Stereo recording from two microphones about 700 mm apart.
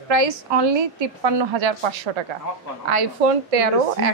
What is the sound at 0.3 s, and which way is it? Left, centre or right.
A woman's voice, right.